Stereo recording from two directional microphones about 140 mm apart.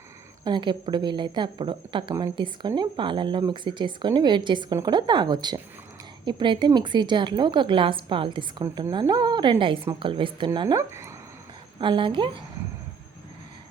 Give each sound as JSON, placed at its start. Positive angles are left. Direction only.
{"t": 0.4, "sound": "a woman's voice", "side_deg": -35}
{"t": 10.8, "sound": "speech", "side_deg": -20}
{"t": 11.8, "sound": "a woman's voice", "side_deg": -35}